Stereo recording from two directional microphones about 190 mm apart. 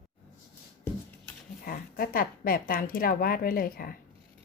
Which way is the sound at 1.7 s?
50° left (ahead or behind).